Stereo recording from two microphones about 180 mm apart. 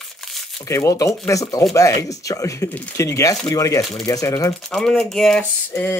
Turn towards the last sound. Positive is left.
turn(degrees=10)  # may be behind; listen again after turning